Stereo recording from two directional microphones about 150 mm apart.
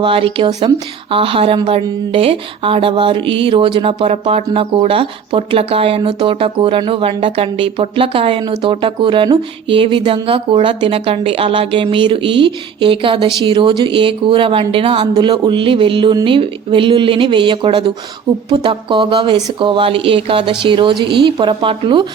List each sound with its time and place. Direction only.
0.0 s speech: 35° right (ahead or behind)